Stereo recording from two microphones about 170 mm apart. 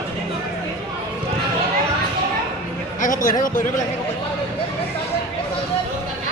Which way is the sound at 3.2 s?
55° left (ahead or behind).